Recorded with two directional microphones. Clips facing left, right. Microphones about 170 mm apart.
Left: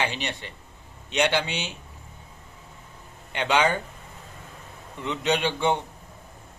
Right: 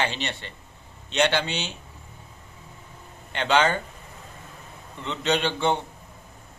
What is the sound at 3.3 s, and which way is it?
Speech, 10° left (ahead or behind).